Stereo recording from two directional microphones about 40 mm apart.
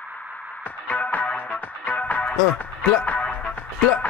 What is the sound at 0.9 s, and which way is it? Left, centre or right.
Music, left.